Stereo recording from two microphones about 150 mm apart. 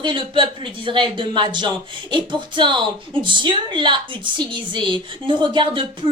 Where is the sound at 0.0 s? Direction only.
35° right (ahead or behind).